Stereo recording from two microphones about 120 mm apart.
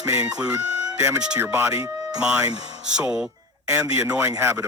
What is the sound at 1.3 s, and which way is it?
Speech, 20° right (ahead or behind).